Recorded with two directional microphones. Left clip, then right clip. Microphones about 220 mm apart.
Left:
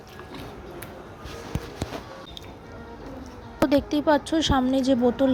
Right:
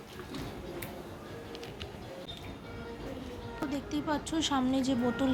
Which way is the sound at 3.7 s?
35° left (ahead or behind).